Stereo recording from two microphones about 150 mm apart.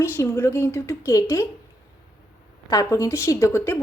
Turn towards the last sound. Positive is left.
turn(degrees=15)  # may be behind; listen again after turning